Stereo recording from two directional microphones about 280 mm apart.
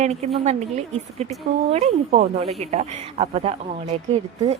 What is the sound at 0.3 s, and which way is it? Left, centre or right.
Speech, right.